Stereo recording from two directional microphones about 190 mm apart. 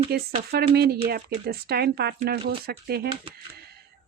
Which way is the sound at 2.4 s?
30° right (ahead or behind).